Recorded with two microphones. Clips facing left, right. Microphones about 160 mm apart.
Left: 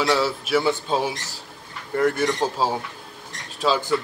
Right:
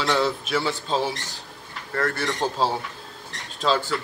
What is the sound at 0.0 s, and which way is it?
Speech, 10° left (ahead or behind).